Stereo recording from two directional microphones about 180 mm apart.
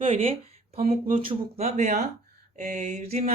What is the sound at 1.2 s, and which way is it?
Speech, 35° right (ahead or behind).